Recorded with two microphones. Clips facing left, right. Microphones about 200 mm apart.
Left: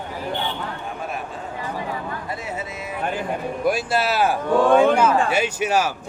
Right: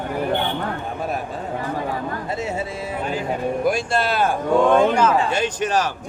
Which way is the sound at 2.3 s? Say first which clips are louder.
Right 4 dB; 25° right (ahead or behind).